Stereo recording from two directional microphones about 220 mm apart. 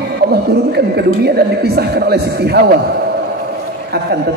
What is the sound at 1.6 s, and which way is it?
Speech, 45° right (ahead or behind).